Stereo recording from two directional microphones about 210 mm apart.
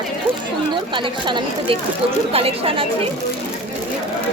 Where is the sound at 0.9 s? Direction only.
25° right (ahead or behind).